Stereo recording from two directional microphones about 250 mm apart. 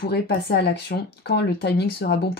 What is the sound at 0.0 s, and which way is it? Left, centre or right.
Speech, left.